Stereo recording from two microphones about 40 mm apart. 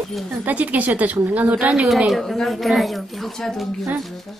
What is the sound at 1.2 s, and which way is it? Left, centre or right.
Speech, right.